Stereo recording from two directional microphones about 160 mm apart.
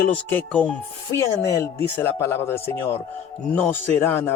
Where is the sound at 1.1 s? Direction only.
20° left (ahead or behind).